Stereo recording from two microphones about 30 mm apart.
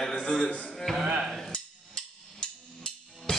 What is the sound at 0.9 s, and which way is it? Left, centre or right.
Speech, centre.